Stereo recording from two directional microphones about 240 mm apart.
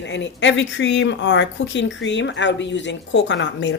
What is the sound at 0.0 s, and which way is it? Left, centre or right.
A woman's voice, left.